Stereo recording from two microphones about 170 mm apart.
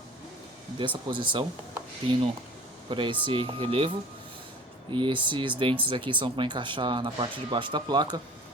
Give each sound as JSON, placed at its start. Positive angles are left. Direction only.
{"t": 0.8, "sound": "speech", "side_deg": -30}
{"t": 2.9, "sound": "speech", "side_deg": -30}